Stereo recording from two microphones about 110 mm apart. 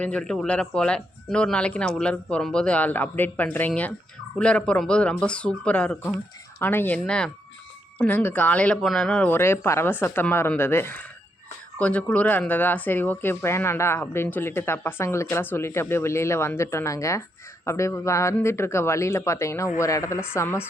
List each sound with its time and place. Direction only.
0.0 s speech: 10° left (ahead or behind)
9.3 s speech: 25° left (ahead or behind)